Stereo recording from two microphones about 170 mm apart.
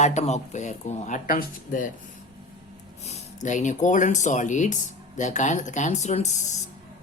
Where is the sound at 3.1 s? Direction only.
45° left (ahead or behind).